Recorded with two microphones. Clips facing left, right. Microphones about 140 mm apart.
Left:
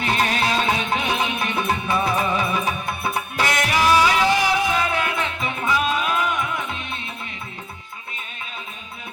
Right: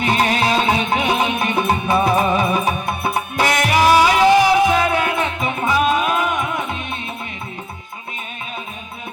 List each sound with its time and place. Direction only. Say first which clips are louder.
0.0 s music: right 4 dB; 20° right (ahead or behind)